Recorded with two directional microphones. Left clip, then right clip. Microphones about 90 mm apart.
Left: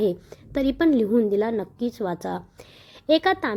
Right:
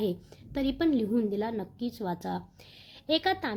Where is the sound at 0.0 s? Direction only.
50° left (ahead or behind).